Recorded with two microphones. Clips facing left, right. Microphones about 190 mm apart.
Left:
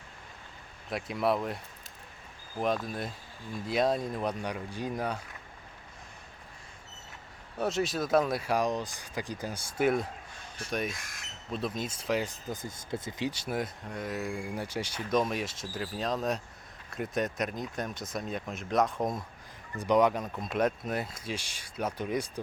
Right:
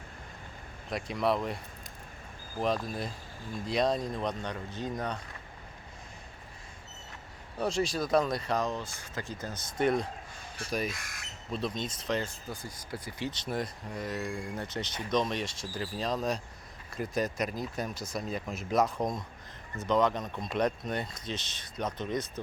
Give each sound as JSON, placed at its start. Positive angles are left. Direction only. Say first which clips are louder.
{"t": 0.9, "sound": "speech", "louder": "even", "side_deg": 0}
{"t": 2.6, "sound": "speech", "louder": "even", "side_deg": 0}
{"t": 7.6, "sound": "speech", "louder": "even", "side_deg": 0}
{"t": 12.5, "sound": "speech", "louder": "left 4 dB", "side_deg": 25}